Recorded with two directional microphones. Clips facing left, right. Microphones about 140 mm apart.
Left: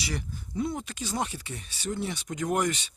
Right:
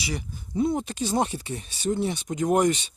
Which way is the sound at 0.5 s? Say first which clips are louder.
Right 7 dB; 25° right (ahead or behind).